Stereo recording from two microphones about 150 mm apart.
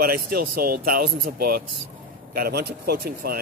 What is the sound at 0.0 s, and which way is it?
Speech, 80° right.